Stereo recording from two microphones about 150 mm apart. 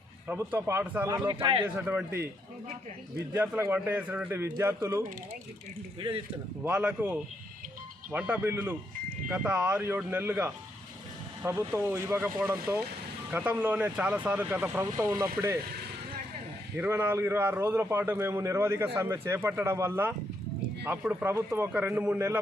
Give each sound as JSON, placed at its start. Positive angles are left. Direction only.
{"t": 0.3, "sound": "a man's voice", "side_deg": -10}
{"t": 1.3, "sound": "a man's voice", "side_deg": -35}
{"t": 1.6, "sound": "a man's voice", "side_deg": -10}
{"t": 3.3, "sound": "a man's voice", "side_deg": -10}
{"t": 6.0, "sound": "a man's voice", "side_deg": -35}
{"t": 6.6, "sound": "a man's voice", "side_deg": -10}
{"t": 16.7, "sound": "a man's voice", "side_deg": -15}